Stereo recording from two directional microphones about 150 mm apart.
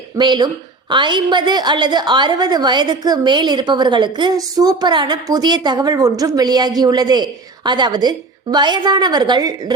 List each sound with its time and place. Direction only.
0.2 s a woman's voice: 30° right (ahead or behind)